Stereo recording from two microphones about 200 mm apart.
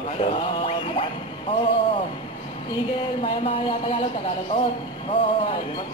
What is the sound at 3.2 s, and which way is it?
Speech, 25° left (ahead or behind).